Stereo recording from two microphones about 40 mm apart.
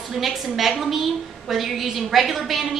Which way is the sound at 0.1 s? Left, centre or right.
Centre.